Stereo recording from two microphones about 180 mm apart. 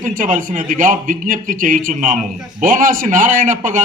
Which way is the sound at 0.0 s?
45° right (ahead or behind).